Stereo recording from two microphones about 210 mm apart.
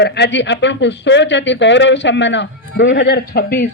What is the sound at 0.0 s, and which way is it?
A woman's voice, 55° left (ahead or behind).